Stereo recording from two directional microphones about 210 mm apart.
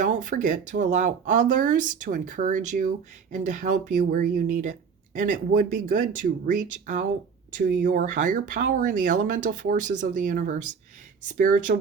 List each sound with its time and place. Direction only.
0.0 s speech: 35° right (ahead or behind)